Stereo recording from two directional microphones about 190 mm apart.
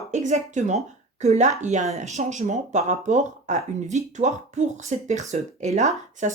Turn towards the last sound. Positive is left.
turn(degrees=-40)  # may be behind; listen again after turning